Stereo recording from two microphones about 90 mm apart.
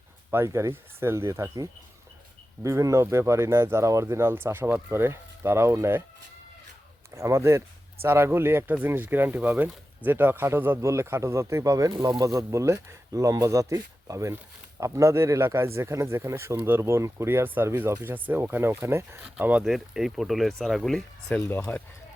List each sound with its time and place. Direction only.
0.3 s speech: 30° right (ahead or behind)
2.6 s speech: 35° right (ahead or behind)
7.1 s speech: 35° right (ahead or behind)
19.2 s speech: 15° right (ahead or behind)
19.6 s speech: 5° right (ahead or behind)
21.4 s speech: 20° left (ahead or behind)